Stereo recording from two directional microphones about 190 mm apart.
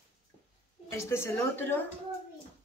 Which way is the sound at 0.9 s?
15° left (ahead or behind).